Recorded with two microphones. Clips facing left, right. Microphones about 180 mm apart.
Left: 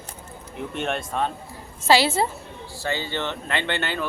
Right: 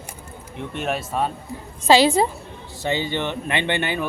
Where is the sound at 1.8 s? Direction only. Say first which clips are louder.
Right 4 dB; 15° right (ahead or behind).